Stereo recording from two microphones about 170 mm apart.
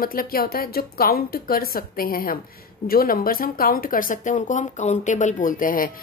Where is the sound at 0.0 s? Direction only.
60° left (ahead or behind).